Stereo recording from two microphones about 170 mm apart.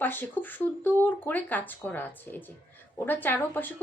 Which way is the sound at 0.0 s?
10° left (ahead or behind).